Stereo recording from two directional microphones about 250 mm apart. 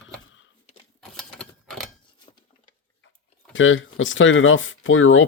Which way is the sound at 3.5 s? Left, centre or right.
Left.